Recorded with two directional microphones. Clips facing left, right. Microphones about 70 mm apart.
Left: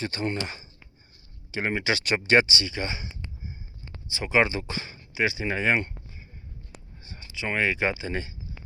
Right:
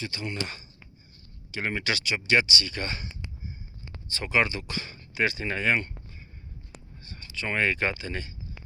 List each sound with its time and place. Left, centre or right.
0.0 s speech: left
1.5 s speech: left
2.0 s speech: left
5.1 s speech: centre
7.0 s speech: centre